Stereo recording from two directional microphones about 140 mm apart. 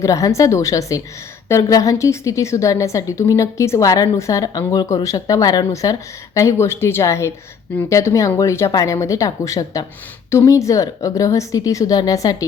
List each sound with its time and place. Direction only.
0.0 s a woman's voice: 25° left (ahead or behind)